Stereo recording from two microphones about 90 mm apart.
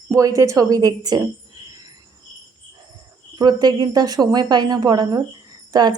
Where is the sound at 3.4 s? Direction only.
50° right (ahead or behind).